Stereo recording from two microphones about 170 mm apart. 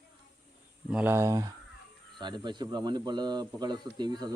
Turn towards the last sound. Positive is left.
turn(degrees=-25)  # may be behind; listen again after turning